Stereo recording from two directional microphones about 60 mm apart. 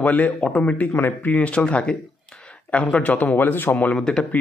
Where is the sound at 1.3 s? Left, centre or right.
Left.